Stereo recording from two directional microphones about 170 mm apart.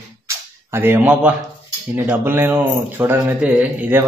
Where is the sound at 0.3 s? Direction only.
15° right (ahead or behind).